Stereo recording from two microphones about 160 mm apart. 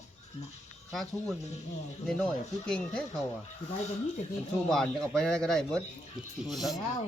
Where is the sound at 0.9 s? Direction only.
Centre (ahead or behind).